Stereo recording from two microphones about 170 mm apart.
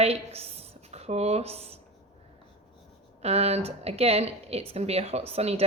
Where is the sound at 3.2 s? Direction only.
35° right (ahead or behind).